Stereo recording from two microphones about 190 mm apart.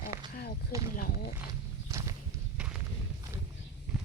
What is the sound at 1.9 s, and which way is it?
Walk, 15° right (ahead or behind).